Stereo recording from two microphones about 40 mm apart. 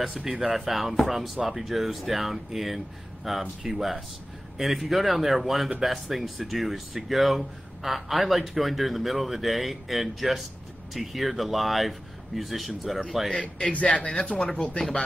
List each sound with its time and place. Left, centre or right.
0.1 s speech: centre
13.4 s a man's voice: left